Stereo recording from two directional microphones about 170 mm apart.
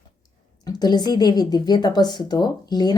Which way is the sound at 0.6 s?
25° left (ahead or behind).